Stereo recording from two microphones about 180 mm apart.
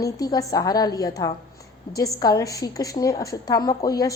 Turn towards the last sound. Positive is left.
turn(degrees=20)  # may be behind; listen again after turning